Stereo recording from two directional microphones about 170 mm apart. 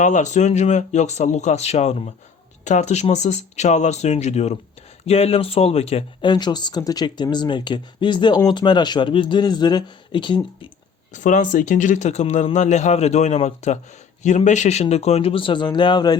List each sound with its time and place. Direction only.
0.0 s speech: 45° left (ahead or behind)
6.3 s speech: 25° left (ahead or behind)
11.1 s speech: 50° left (ahead or behind); by 16.1 s 25° left (ahead or behind)